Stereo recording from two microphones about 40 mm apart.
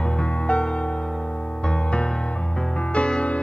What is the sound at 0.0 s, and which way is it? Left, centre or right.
Music, left.